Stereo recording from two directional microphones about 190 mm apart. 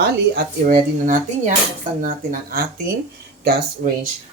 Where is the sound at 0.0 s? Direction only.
50° right (ahead or behind).